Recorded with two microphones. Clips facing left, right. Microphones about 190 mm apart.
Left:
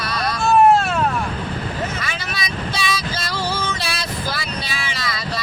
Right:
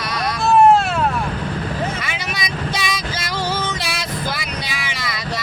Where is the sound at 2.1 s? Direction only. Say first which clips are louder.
Right 1 dB; 20° right (ahead or behind).